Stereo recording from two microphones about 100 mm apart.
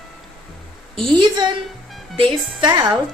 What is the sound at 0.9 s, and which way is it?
Speech, 55° right (ahead or behind).